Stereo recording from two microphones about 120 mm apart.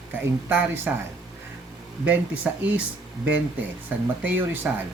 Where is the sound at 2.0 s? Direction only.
10° right (ahead or behind).